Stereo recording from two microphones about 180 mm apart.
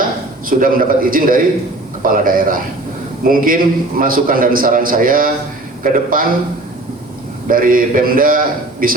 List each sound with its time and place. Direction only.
0.6 s a man's voice: 50° right (ahead or behind)
7.4 s a man's voice: 50° right (ahead or behind)